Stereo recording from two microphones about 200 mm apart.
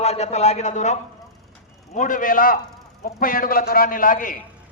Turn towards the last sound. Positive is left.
turn(degrees=40)  # may be behind; listen again after turning